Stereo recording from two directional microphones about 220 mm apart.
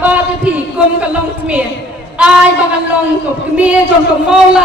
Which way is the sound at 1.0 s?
5° right (ahead or behind).